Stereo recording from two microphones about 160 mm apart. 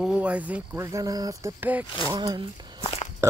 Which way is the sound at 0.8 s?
20° right (ahead or behind).